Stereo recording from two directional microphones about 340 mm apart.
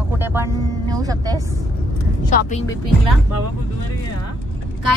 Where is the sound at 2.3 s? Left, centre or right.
Left.